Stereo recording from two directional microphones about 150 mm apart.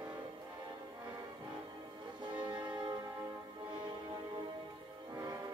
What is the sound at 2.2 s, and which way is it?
Music, 30° right (ahead or behind).